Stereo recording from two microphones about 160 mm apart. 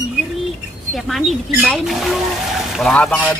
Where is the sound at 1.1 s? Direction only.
Centre (ahead or behind).